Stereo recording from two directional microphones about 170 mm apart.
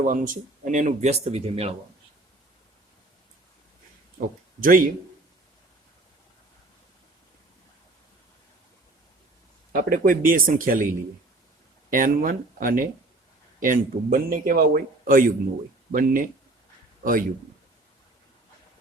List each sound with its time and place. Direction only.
0.0 s speech: 50° right (ahead or behind); by 1.7 s 35° right (ahead or behind)
4.6 s speech: 55° right (ahead or behind)
9.7 s a man's voice: 55° right (ahead or behind)
11.9 s a man's voice: 55° right (ahead or behind)